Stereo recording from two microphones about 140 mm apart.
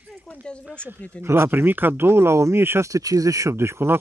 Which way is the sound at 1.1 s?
20° right (ahead or behind).